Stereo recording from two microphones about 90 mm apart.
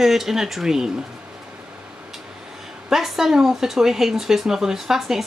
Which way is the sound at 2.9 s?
5° right (ahead or behind).